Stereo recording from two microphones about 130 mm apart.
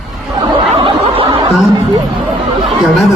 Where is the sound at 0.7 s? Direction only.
45° right (ahead or behind).